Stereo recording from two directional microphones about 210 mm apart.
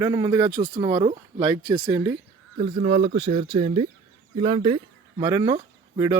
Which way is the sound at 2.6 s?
30° right (ahead or behind).